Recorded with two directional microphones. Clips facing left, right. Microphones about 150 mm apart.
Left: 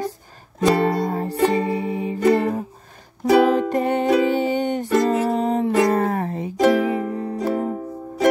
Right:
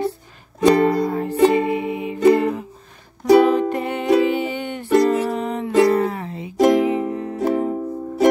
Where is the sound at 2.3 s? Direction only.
40° left (ahead or behind).